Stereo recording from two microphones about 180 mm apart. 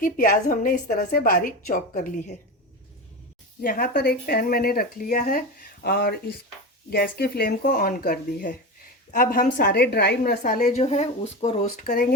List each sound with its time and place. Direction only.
0.0 s a woman's voice: 50° left (ahead or behind)
3.6 s speech: 50° left (ahead or behind)
5.8 s speech: 60° left (ahead or behind)
10.7 s speech: 40° left (ahead or behind)